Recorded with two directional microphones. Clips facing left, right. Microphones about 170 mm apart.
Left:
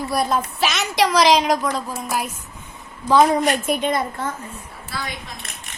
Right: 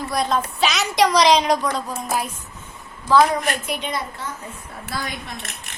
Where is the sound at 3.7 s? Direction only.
50° left (ahead or behind).